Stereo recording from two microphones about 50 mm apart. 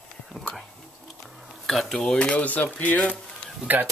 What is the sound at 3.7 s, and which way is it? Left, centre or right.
Speech, right.